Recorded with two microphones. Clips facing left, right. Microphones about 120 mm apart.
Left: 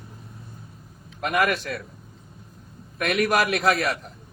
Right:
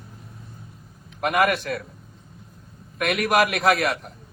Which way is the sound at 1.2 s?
45° right (ahead or behind).